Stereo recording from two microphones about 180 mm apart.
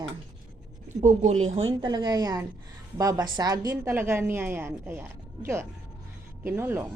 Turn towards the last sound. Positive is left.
turn(degrees=-10)  # may be behind; listen again after turning